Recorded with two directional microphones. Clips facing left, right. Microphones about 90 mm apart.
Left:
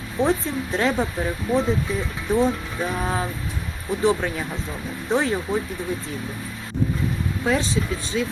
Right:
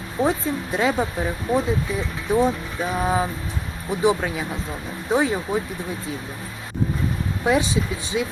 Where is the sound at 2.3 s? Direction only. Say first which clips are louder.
Right 1 dB; 10° right (ahead or behind).